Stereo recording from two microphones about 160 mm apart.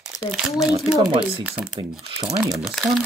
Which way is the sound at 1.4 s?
10° right (ahead or behind).